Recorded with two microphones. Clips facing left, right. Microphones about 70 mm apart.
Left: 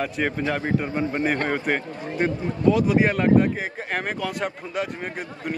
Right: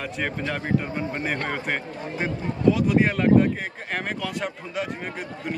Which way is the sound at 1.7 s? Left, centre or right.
Centre.